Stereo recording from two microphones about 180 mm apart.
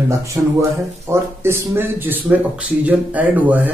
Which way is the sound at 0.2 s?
15° right (ahead or behind).